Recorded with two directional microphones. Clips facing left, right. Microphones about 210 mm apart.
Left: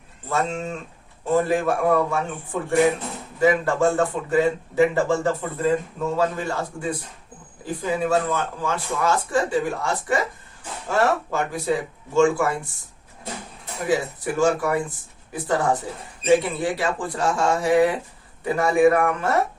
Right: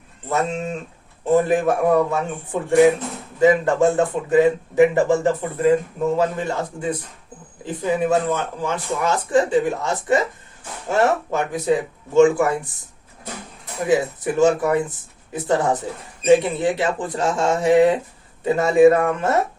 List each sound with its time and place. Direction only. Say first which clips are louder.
0.3 s speech: right 2 dB; 20° right (ahead or behind)
13.8 s speech: right 4 dB; 20° right (ahead or behind)